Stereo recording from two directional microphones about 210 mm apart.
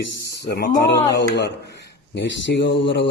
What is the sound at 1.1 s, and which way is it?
Speech, 55° left (ahead or behind).